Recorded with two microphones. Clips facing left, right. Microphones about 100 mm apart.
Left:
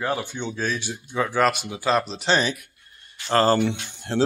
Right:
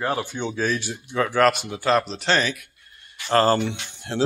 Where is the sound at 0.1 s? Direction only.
5° right (ahead or behind).